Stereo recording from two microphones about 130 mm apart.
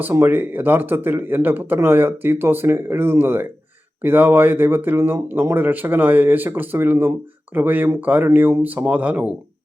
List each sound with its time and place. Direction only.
0.0 s speech: 20° right (ahead or behind)